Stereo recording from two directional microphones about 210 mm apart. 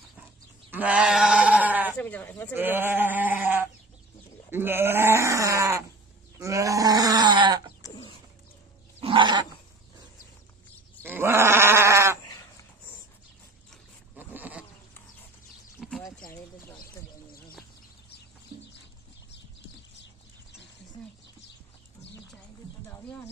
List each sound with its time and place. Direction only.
0.7 s goat: 5° right (ahead or behind)
2.0 s speech: 5° left (ahead or behind)
2.5 s goat: 10° right (ahead or behind)
4.5 s speech: 10° right (ahead or behind)
6.4 s grunt: 15° right (ahead or behind)
7.8 s bird: 15° left (ahead or behind)
9.0 s roaring cats: 25° right (ahead or behind)
11.0 s sheep: 10° right (ahead or behind)
14.1 s goat: 10° right (ahead or behind)
15.8 s a sound: centre (ahead or behind)
16.8 s a sound: 45° left (ahead or behind)